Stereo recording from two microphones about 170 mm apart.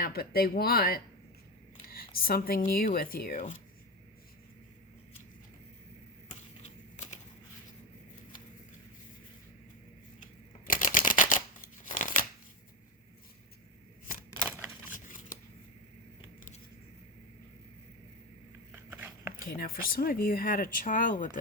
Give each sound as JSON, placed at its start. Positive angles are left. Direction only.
{"t": 0.0, "sound": "speech", "side_deg": 60}
{"t": 6.6, "sound": "typewriter", "side_deg": 45}
{"t": 10.7, "sound": "shuffling cards", "side_deg": 55}
{"t": 14.8, "sound": "shuffling cards", "side_deg": 50}
{"t": 18.7, "sound": "a sound", "side_deg": -15}
{"t": 19.4, "sound": "speech", "side_deg": 60}